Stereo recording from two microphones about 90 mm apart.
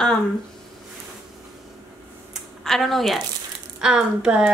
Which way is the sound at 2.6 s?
5° left (ahead or behind).